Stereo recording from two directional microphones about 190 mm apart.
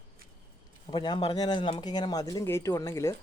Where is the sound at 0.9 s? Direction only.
25° left (ahead or behind).